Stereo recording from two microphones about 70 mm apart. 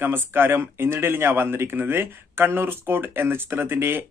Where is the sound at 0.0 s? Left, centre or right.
Right.